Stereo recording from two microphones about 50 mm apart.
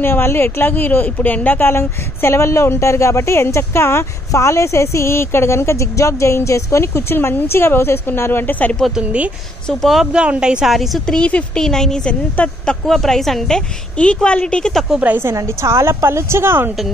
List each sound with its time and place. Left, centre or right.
0.0 s a woman's voice: left
8.8 s a woman's voice: centre
10.1 s speech: right
10.7 s a woman's voice: centre
11.2 s a woman's voice: left
11.6 s a woman's voice: centre
12.1 s a woman's voice: left
12.8 s a woman's voice: centre
13.6 s a woman's voice: left
15.3 s a woman's voice: right